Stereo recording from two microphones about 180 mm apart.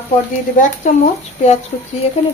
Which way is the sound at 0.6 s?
40° left (ahead or behind).